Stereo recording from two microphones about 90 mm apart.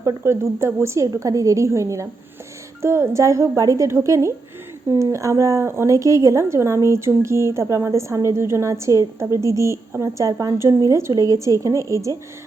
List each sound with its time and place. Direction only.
0.0 s a woman's voice: 30° right (ahead or behind)